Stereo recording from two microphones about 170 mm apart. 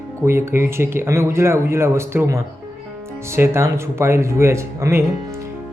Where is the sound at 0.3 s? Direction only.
15° right (ahead or behind).